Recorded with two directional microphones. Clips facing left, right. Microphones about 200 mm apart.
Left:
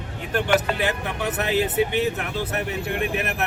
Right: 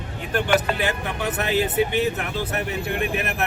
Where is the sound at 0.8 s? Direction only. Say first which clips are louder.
Even; 20° left (ahead or behind).